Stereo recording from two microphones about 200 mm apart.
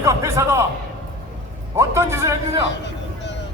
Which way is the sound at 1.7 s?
15° right (ahead or behind).